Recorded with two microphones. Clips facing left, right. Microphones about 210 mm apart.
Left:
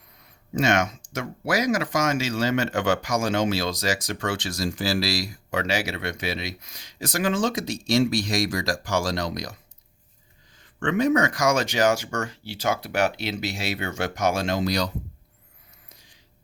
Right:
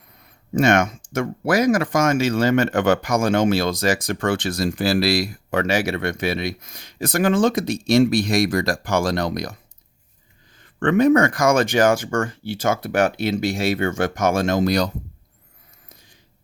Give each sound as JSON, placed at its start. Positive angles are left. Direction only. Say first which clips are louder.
{"t": 0.5, "sound": "speech", "louder": "right 5 dB", "side_deg": -55}
{"t": 10.6, "sound": "speech", "louder": "right 6 dB", "side_deg": -55}